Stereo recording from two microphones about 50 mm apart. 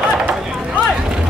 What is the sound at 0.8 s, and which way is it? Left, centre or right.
Boat, centre.